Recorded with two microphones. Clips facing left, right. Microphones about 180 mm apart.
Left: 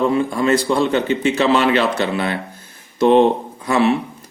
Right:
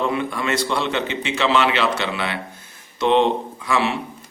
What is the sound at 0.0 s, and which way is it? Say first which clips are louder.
Speech: left 6 dB; 40° left (ahead or behind).